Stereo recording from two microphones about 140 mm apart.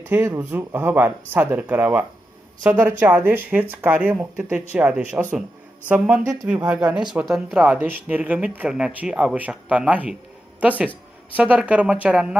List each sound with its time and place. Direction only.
0.0 s speech: 20° right (ahead or behind)